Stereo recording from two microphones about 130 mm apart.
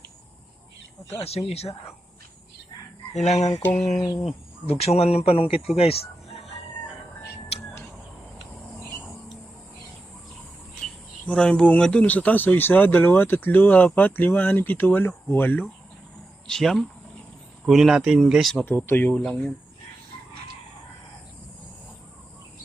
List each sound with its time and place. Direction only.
1.2 s speech: 50° left (ahead or behind)
3.2 s speech: 55° left (ahead or behind)
4.6 s speech: 55° left (ahead or behind)
11.3 s speech: 5° left (ahead or behind)
16.5 s speech: centre (ahead or behind)
18.5 s speech: 15° left (ahead or behind)